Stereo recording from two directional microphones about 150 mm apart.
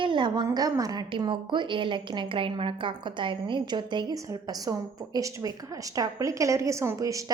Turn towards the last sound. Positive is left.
turn(degrees=-20)  # may be behind; listen again after turning